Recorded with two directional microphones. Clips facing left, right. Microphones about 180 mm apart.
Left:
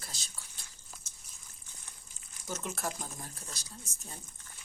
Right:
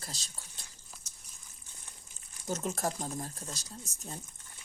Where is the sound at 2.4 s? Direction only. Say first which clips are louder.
Right 4 dB; 40° right (ahead or behind).